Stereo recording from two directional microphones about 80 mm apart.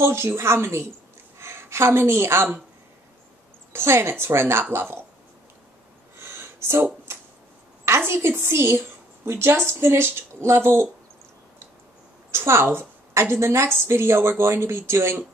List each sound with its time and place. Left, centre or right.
0.0 s a woman's voice: right
3.7 s a woman's voice: right
6.1 s a sound: right
7.8 s a woman's voice: right
12.3 s a woman's voice: right